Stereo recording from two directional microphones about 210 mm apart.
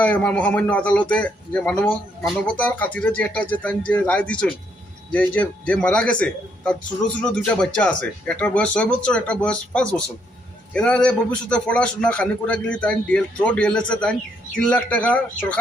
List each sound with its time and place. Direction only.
0.0 s a man's voice: 5° left (ahead or behind)